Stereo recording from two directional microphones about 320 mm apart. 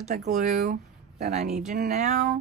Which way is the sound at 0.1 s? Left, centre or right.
Right.